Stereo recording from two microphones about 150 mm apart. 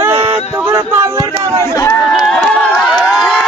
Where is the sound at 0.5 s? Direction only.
15° right (ahead or behind).